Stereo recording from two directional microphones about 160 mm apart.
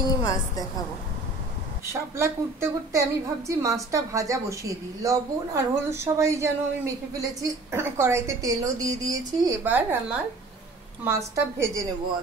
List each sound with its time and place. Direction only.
0.0 s a woman's voice: 25° left (ahead or behind)
1.9 s a woman's voice: 15° right (ahead or behind)
9.7 s a woman's voice: 10° right (ahead or behind)